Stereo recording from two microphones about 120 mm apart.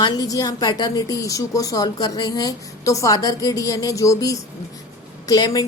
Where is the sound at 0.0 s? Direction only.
30° left (ahead or behind).